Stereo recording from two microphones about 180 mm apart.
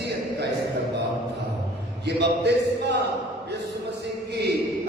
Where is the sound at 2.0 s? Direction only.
70° right (ahead or behind).